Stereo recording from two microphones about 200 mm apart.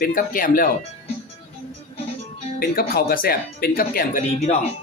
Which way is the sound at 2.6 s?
50° left (ahead or behind).